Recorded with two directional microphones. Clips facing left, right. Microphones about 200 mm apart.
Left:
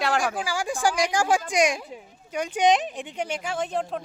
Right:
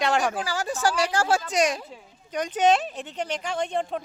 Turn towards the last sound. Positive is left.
turn(degrees=0)  # may be behind; listen again after turning